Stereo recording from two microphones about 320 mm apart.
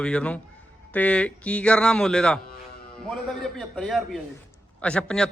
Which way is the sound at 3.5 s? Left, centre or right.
Centre.